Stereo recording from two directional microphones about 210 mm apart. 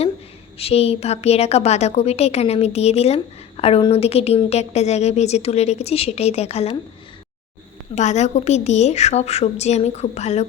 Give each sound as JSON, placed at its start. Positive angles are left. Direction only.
{"t": 0.6, "sound": "a woman's voice", "side_deg": 30}
{"t": 7.9, "sound": "a woman's voice", "side_deg": 35}